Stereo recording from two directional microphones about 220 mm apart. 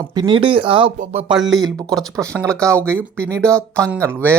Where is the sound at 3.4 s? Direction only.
5° left (ahead or behind).